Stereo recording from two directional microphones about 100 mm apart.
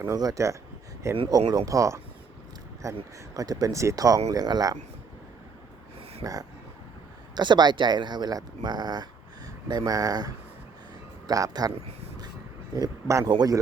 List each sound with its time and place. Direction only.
0.1 s speech: 35° right (ahead or behind)
6.2 s speech: 40° right (ahead or behind)
12.7 s speech: 35° right (ahead or behind)